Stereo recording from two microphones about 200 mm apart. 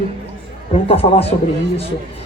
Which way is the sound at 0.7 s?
30° left (ahead or behind).